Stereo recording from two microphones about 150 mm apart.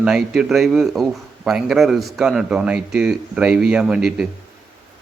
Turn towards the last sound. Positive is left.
turn(degrees=-5)  # may be behind; listen again after turning